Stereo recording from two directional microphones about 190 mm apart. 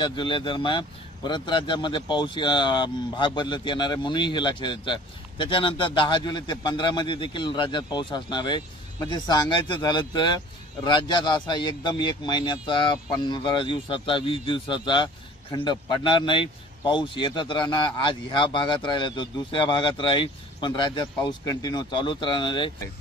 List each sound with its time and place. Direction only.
0.0 s speech: 25° left (ahead or behind)